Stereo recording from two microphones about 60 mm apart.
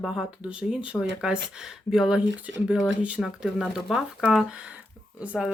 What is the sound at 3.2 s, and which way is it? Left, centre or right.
Speech, centre.